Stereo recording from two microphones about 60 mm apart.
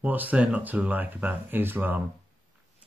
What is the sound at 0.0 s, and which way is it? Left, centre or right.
Speech, right.